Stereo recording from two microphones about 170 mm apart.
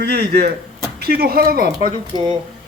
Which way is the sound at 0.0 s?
75° right (ahead or behind).